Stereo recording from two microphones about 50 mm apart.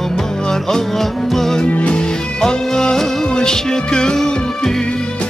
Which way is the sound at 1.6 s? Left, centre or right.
Left.